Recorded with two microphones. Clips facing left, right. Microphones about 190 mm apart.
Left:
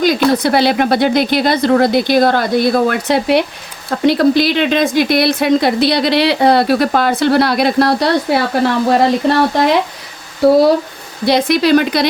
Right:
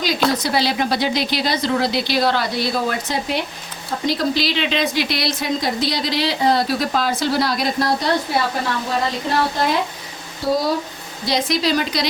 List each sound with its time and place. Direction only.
0.3 s speech: 60° left (ahead or behind)
11.3 s speech: 60° left (ahead or behind)